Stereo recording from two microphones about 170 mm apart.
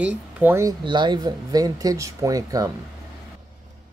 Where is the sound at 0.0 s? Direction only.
10° right (ahead or behind).